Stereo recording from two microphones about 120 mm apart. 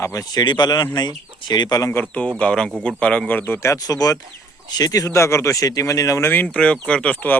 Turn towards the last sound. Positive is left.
turn(degrees=10)  # may be behind; listen again after turning